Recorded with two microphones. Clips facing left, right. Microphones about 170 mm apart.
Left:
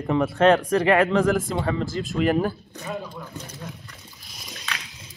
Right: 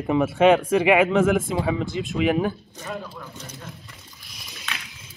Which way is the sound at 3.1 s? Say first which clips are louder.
Left 2 dB; 15° left (ahead or behind).